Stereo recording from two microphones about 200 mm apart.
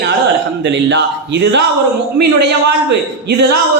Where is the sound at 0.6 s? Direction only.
65° right (ahead or behind).